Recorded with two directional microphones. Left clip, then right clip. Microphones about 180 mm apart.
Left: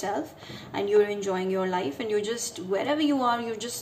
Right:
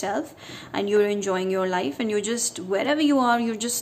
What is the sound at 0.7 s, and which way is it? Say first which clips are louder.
A woman's voice: right 2 dB; 35° right (ahead or behind).